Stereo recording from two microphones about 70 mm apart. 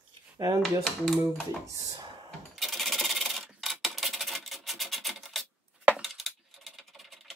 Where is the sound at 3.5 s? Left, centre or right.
Centre.